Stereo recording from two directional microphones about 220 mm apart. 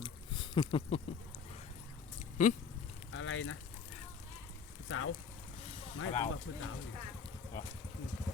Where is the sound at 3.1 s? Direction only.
65° left (ahead or behind).